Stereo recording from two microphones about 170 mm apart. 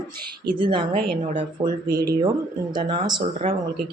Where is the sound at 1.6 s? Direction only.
25° right (ahead or behind).